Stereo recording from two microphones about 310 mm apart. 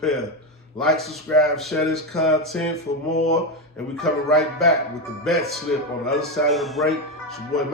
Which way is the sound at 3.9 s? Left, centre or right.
Centre.